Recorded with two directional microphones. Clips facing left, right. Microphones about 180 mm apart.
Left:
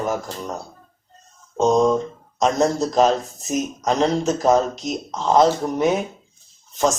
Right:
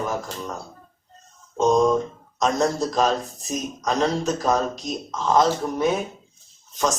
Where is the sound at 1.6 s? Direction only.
Centre (ahead or behind).